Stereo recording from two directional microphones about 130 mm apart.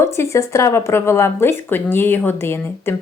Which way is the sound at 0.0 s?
20° left (ahead or behind).